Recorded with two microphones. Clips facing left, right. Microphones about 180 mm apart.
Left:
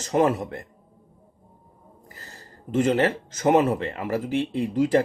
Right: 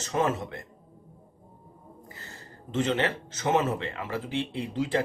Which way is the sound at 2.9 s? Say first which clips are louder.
Left 6 dB; 40° left (ahead or behind).